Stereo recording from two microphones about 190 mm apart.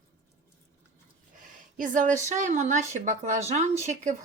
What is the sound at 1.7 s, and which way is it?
Speech, 45° right (ahead or behind).